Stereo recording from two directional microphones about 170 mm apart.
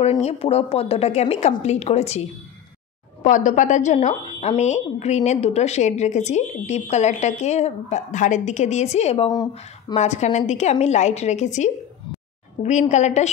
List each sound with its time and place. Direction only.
0.2 s a woman's voice: 35° left (ahead or behind)